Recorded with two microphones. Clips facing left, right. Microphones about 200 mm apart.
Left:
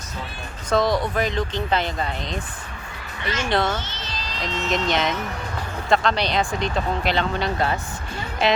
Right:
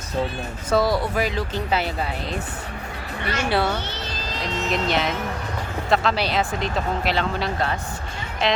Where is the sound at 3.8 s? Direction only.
55° right (ahead or behind).